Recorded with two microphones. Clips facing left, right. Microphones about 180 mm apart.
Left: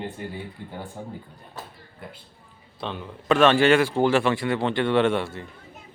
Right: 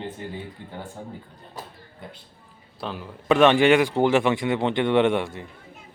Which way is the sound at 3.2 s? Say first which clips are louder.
Right 1 dB; 15° right (ahead or behind).